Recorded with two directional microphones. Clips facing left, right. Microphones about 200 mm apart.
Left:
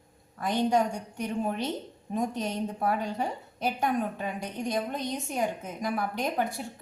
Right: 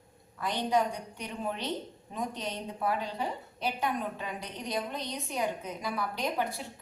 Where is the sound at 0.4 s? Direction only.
45° left (ahead or behind).